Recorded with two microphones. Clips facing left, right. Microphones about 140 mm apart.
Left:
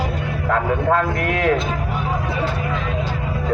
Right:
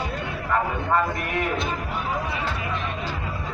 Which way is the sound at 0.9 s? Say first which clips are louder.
Left 4 dB; 90° left.